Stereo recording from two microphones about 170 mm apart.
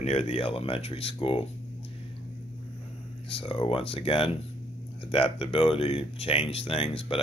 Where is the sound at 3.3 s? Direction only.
35° left (ahead or behind).